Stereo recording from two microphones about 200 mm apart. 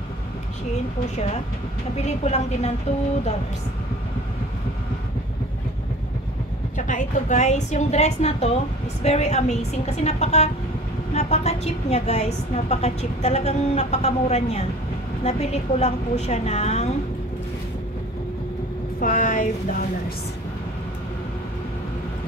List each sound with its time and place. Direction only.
2.0 s a woman's voice: 35° left (ahead or behind)
6.8 s a woman's voice: 40° left (ahead or behind)
18.9 s a woman's voice: 40° left (ahead or behind)